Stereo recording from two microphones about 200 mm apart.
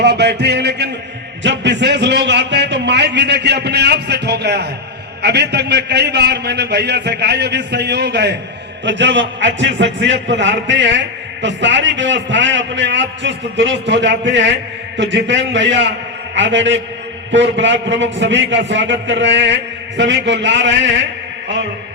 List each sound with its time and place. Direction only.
0.0 s a man's voice: 60° right (ahead or behind)